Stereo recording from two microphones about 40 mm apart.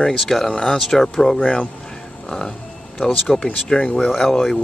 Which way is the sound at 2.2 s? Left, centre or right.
Centre.